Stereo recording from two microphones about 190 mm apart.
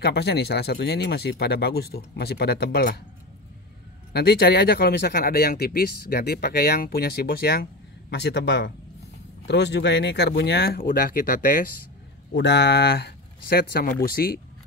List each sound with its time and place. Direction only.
0.0 s speech: 60° left (ahead or behind)
4.1 s speech: 55° left (ahead or behind)
8.1 s a man's voice: 65° left (ahead or behind); by 11.6 s 45° left (ahead or behind)
12.4 s speech: 65° left (ahead or behind)